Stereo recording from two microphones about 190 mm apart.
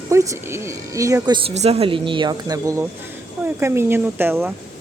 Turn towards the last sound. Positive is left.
turn(degrees=-10)  # may be behind; listen again after turning